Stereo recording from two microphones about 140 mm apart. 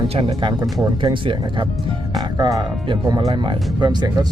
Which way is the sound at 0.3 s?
30° right (ahead or behind).